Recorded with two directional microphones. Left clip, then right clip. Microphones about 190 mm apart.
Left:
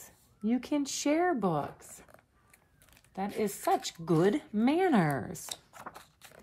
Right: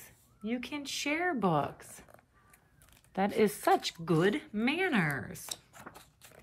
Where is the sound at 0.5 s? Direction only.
20° left (ahead or behind); by 3.9 s centre (ahead or behind).